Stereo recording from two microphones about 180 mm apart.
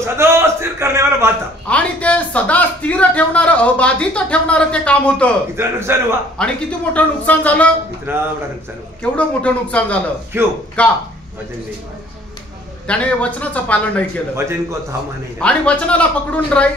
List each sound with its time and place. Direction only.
0.0 s a sound: 15° right (ahead or behind)
1.7 s a man's voice: 5° left (ahead or behind)
5.6 s a man's voice: 15° right (ahead or behind)
6.3 s a man's voice: 5° left (ahead or behind)
8.1 s a man's voice: 10° right (ahead or behind)
9.1 s a man's voice: 5° left (ahead or behind)
10.3 s a man's voice: 15° right (ahead or behind)
10.8 s a man's voice: 5° left (ahead or behind)
12.8 s a man's voice: 5° left (ahead or behind)
14.3 s a man's voice: 15° right (ahead or behind)
15.3 s a man's voice: 5° left (ahead or behind)